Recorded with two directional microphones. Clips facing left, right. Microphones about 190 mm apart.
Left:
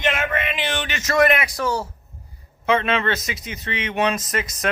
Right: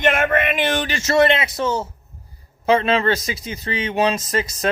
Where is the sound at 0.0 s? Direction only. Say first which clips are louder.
Right 5 dB; 50° right (ahead or behind); by 1.9 s 20° right (ahead or behind).